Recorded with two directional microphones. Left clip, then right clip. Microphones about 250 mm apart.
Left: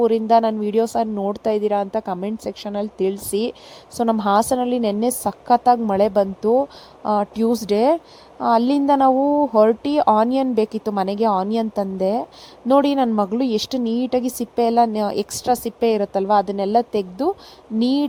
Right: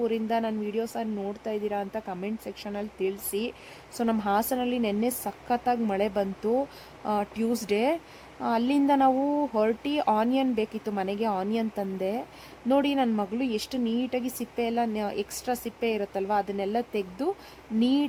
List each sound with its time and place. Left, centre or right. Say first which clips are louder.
0.0 s speech: left 12 dB; left